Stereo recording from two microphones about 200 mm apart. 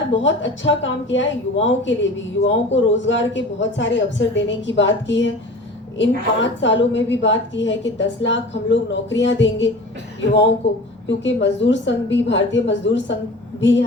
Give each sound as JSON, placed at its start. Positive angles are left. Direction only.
{"t": 0.2, "sound": "a woman's voice", "side_deg": 65}
{"t": 10.6, "sound": "a woman's voice", "side_deg": 65}